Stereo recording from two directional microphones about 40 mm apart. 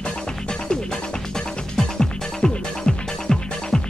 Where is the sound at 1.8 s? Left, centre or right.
Centre.